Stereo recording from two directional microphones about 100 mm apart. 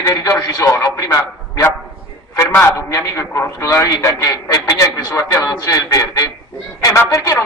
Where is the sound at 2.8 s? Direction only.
30° left (ahead or behind).